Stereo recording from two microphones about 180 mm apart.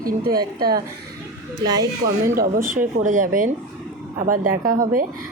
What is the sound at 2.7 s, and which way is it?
A woman's voice, 45° right (ahead or behind).